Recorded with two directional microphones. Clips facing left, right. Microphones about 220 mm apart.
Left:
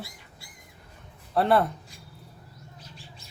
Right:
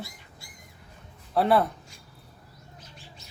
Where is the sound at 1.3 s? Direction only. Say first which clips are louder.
Even; centre (ahead or behind).